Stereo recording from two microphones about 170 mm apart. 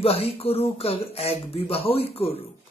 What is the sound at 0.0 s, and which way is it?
Speech, 35° left (ahead or behind).